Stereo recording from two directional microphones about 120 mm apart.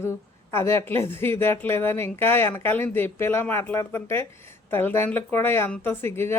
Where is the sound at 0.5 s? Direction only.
20° left (ahead or behind).